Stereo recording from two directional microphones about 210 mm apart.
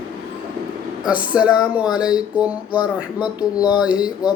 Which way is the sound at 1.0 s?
5° right (ahead or behind).